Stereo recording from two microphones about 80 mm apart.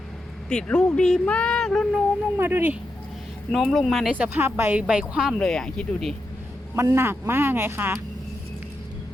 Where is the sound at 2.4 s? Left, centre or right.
Right.